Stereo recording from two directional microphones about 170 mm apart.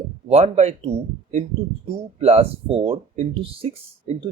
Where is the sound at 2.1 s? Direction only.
40° right (ahead or behind).